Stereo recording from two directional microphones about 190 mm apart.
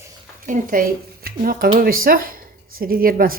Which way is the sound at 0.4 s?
45° right (ahead or behind).